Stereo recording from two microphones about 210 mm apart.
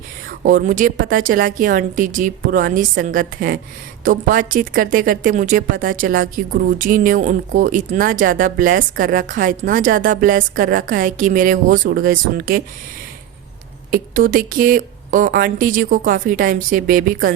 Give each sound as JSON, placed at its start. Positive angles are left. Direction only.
{"t": 0.4, "sound": "a woman's voice", "side_deg": -40}
{"t": 13.9, "sound": "a woman's voice", "side_deg": -40}